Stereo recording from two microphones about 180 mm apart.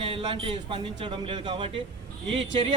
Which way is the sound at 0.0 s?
30° right (ahead or behind).